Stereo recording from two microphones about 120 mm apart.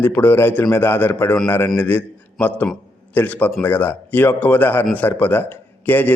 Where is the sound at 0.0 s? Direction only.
15° left (ahead or behind).